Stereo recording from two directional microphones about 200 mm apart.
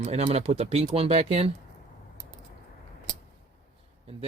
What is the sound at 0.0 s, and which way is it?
Speech, 35° right (ahead or behind).